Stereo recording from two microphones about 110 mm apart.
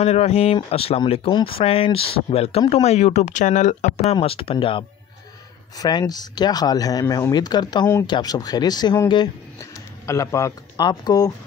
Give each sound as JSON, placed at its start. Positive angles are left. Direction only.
{"t": 0.0, "sound": "speech", "side_deg": 75}
{"t": 2.7, "sound": "speech", "side_deg": 80}
{"t": 4.1, "sound": "speech", "side_deg": 60}
{"t": 5.8, "sound": "speech", "side_deg": 35}
{"t": 9.6, "sound": "a sound", "side_deg": 30}
{"t": 10.8, "sound": "speech", "side_deg": 40}